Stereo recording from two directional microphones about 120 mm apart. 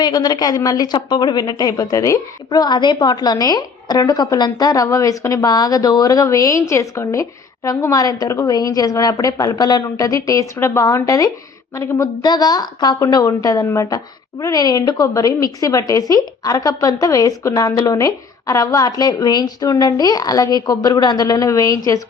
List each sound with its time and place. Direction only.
0.0 s a woman's voice: 35° left (ahead or behind)